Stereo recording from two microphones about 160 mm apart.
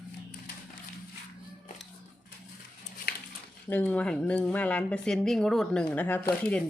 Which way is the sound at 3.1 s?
75° left (ahead or behind).